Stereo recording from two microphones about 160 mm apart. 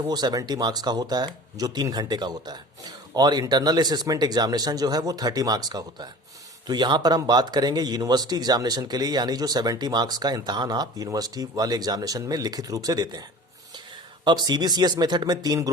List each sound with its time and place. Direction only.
0.0 s speech: 25° right (ahead or behind)
14.3 s speech: 25° right (ahead or behind)